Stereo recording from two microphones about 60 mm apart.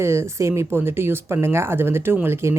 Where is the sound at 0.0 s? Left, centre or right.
Right.